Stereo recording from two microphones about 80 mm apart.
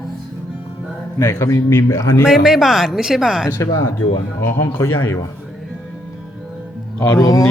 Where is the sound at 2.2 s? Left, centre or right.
Centre.